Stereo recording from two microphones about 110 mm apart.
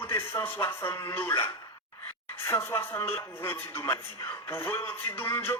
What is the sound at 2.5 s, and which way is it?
Speech, 25° left (ahead or behind).